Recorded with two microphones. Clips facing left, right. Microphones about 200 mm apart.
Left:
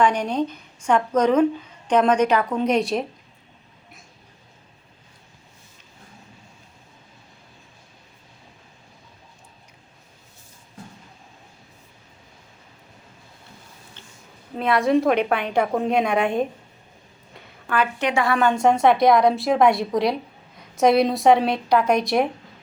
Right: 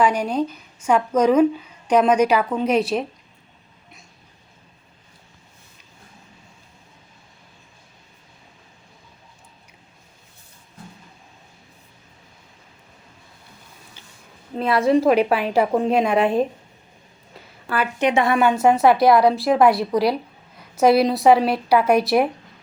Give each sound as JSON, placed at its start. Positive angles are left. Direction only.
{"t": 0.0, "sound": "a woman's voice", "side_deg": -10}
{"t": 14.6, "sound": "a woman's voice", "side_deg": 0}
{"t": 18.0, "sound": "speech", "side_deg": -20}
{"t": 18.3, "sound": "a woman's voice", "side_deg": -5}